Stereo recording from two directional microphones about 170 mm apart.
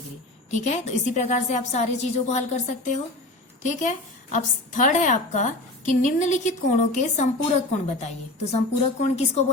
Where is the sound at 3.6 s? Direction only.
45° left (ahead or behind).